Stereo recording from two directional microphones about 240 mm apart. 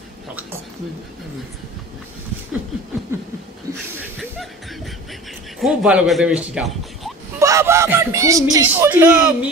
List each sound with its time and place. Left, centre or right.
3.1 s speech: centre
3.7 s a sound: right
5.6 s a man's voice: centre
7.3 s speech: centre